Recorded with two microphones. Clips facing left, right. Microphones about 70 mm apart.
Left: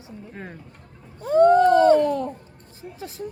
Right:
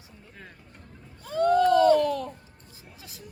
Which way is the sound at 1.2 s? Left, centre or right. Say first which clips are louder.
Left 7 dB; left.